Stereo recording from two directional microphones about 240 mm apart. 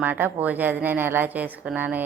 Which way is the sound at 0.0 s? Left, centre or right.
Centre.